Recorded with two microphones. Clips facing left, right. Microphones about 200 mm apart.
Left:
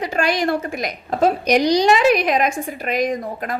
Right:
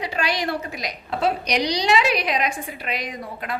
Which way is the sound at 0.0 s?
50° left (ahead or behind).